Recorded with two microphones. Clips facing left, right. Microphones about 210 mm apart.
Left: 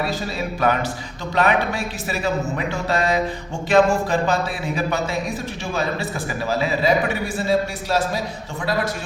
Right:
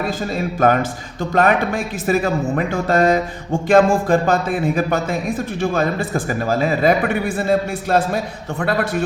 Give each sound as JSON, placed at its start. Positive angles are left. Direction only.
{"t": 0.0, "sound": "a man's voice", "side_deg": -50}